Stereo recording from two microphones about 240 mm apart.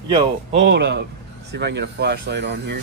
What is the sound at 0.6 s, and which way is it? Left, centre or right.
Speech, right.